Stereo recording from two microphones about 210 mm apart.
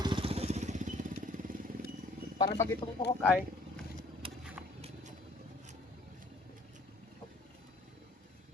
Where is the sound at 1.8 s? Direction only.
40° right (ahead or behind).